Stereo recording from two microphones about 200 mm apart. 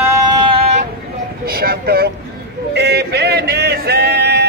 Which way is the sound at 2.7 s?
55° right (ahead or behind).